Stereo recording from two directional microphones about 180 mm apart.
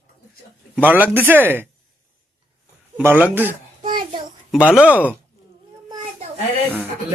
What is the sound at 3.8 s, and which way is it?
Child singing, 50° right (ahead or behind).